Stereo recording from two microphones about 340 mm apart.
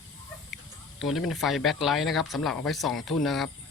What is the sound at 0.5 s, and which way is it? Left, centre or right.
Speech, centre.